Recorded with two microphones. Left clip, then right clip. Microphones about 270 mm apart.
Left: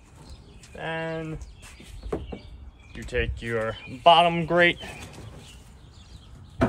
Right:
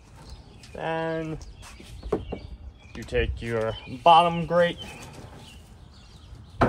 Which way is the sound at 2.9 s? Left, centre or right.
Right.